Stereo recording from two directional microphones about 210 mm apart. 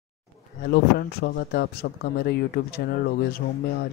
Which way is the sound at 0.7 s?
50° left (ahead or behind).